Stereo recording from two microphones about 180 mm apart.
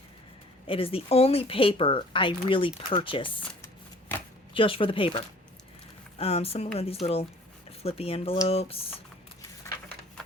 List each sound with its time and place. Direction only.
0.7 s speech: 30° left (ahead or behind)
4.5 s speech: 30° left (ahead or behind)